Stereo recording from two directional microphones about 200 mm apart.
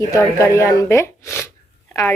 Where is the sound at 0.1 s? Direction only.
15° left (ahead or behind).